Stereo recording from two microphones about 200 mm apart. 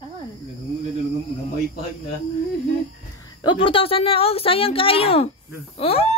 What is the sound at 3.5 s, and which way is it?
Speech, 25° left (ahead or behind).